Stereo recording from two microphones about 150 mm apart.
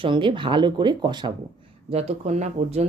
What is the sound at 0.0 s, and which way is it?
Speech, 35° right (ahead or behind).